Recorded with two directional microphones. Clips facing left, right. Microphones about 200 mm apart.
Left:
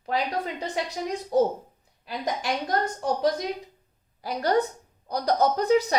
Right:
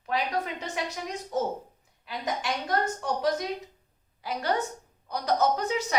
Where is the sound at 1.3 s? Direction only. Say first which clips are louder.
Left 8 dB; 35° left (ahead or behind).